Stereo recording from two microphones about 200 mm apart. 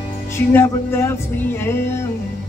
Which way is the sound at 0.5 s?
10° left (ahead or behind).